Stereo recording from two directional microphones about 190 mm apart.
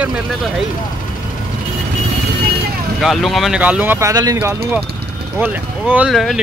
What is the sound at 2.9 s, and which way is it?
Speech, centre (ahead or behind).